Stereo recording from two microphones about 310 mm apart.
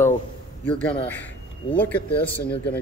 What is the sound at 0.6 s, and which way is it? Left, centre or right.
Speech, centre.